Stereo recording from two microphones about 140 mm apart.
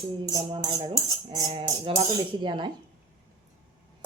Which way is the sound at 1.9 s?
40° right (ahead or behind).